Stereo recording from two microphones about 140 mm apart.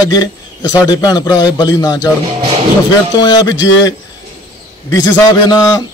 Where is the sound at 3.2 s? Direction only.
30° left (ahead or behind).